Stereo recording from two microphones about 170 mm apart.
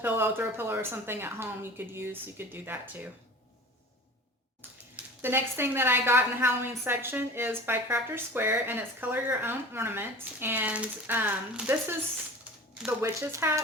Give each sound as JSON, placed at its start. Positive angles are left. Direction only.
{"t": 0.0, "sound": "a woman's voice", "side_deg": -15}
{"t": 4.9, "sound": "a woman's voice", "side_deg": -15}
{"t": 13.0, "sound": "a woman's voice", "side_deg": -15}